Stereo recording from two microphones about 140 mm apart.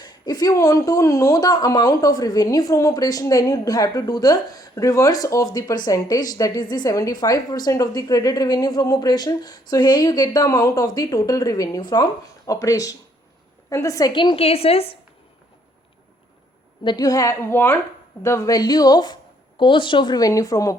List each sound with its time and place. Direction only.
0.0 s a woman's voice: 30° left (ahead or behind); by 14.9 s 45° left (ahead or behind)
16.8 s speech: 30° left (ahead or behind)